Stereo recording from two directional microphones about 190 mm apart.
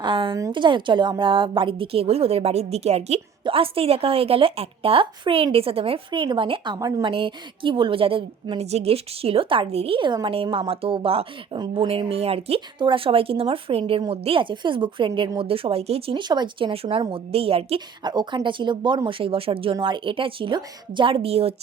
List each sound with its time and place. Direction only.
0.0 s a woman's voice: 25° right (ahead or behind)